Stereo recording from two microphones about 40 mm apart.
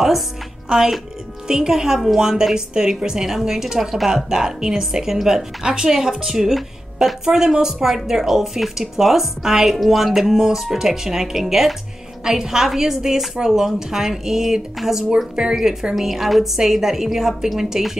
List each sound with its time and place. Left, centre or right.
0.7 s a woman's voice: centre